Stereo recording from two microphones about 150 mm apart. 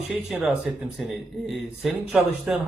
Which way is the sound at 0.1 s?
Centre (ahead or behind).